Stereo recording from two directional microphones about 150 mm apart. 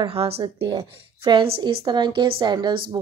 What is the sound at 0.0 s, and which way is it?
A woman's voice, 40° right (ahead or behind).